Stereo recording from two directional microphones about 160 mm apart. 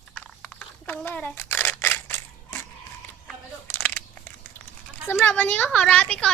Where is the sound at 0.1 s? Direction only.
5° left (ahead or behind).